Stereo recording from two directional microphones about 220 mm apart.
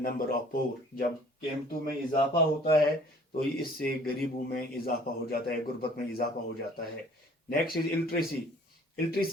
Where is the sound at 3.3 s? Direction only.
45° left (ahead or behind).